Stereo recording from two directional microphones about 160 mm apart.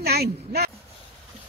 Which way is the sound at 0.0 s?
80° right.